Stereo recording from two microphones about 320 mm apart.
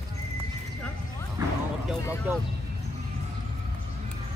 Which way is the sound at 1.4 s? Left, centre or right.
Centre.